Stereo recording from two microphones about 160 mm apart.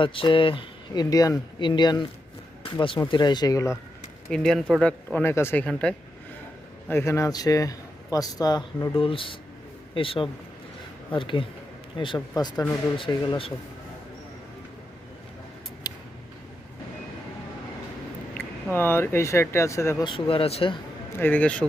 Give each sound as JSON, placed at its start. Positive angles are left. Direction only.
{"t": 0.0, "sound": "speech", "side_deg": 30}
{"t": 4.3, "sound": "speech", "side_deg": 5}
{"t": 15.9, "sound": "a sound", "side_deg": 25}
{"t": 18.3, "sound": "speech", "side_deg": 15}
{"t": 20.1, "sound": "speech", "side_deg": 35}
{"t": 21.2, "sound": "speech", "side_deg": 10}